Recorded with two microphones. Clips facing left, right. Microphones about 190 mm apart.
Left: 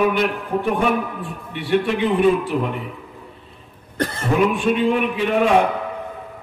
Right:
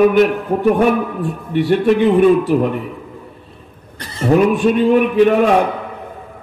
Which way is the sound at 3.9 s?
55° left (ahead or behind).